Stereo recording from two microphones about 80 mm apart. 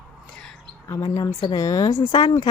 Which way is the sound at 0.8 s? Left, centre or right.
Left.